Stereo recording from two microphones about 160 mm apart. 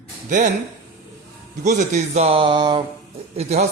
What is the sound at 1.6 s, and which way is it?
Speech, 50° right (ahead or behind).